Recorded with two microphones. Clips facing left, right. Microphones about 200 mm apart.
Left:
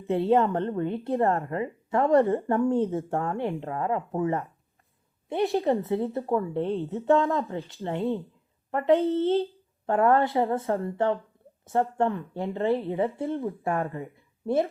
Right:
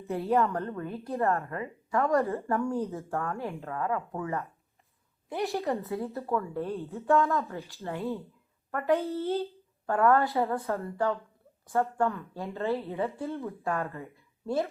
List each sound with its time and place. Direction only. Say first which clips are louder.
0.1 s a woman's voice: left 5 dB; 30° left (ahead or behind)
6.1 s speech: left 6 dB; 20° left (ahead or behind)
6.3 s a woman's voice: left 4 dB; 30° left (ahead or behind)
12.0 s speech: left 4 dB; 15° left (ahead or behind)
12.8 s a woman's voice: left 5 dB; 30° left (ahead or behind)
13.9 s speech: left 5 dB; 15° left (ahead or behind)